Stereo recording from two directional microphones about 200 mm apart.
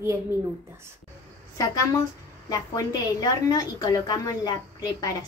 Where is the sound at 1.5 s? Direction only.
15° left (ahead or behind).